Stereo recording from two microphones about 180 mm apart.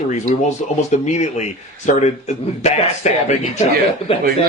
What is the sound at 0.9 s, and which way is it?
A man's voice, 40° left (ahead or behind).